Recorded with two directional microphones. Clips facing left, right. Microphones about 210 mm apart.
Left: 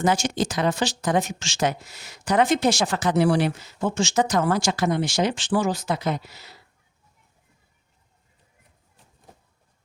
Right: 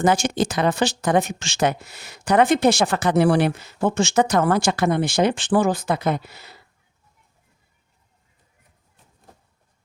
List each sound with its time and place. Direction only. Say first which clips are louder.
0.0 s speech: right 3 dB; 55° right (ahead or behind)